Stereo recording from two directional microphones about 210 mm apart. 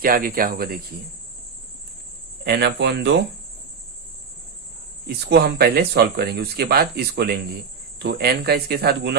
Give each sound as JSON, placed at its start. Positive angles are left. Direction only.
{"t": 0.0, "sound": "speech", "side_deg": -45}
{"t": 2.4, "sound": "speech", "side_deg": -50}
{"t": 5.0, "sound": "speech", "side_deg": -50}